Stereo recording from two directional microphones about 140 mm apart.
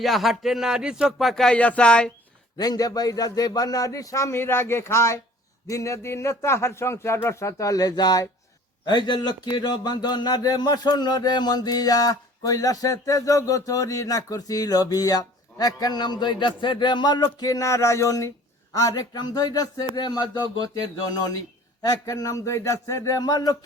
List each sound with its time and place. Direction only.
0.0 s speech: centre (ahead or behind)
2.6 s speech: 25° left (ahead or behind)
21.8 s speech: 25° left (ahead or behind)